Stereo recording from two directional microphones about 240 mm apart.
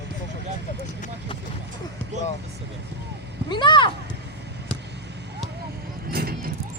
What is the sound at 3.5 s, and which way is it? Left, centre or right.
Speech, centre.